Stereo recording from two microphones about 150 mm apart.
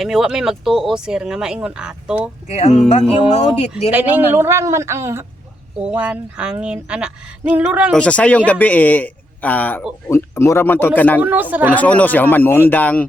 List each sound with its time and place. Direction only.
0.0 s speech: centre (ahead or behind)
2.5 s speech: 45° left (ahead or behind)
3.9 s speech: 15° right (ahead or behind)
7.9 s a man's voice: 10° left (ahead or behind)
11.2 s speech: 10° right (ahead or behind)
11.7 s speech: 10° left (ahead or behind)